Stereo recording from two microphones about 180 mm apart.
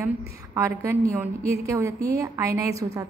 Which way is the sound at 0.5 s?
15° right (ahead or behind).